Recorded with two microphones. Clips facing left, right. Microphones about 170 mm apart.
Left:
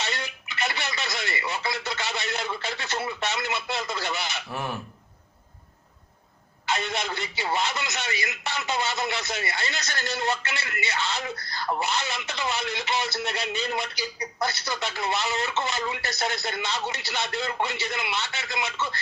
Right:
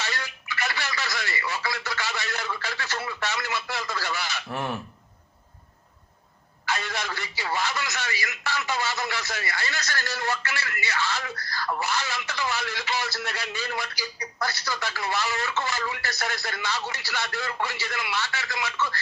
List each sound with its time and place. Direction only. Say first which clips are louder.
0.0 s telephone: left 1 dB; 20° left (ahead or behind)
4.4 s speech: right 2 dB; centre (ahead or behind)
6.7 s speech: left 2 dB; 20° left (ahead or behind)